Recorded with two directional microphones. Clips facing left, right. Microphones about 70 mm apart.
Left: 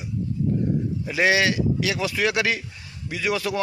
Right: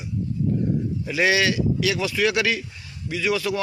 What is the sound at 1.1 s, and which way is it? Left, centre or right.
Speech, left.